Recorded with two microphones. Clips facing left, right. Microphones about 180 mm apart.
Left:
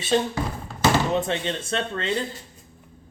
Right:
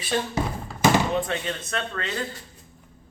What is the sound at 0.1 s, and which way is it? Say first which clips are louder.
Speech: left 3 dB; 25° left (ahead or behind).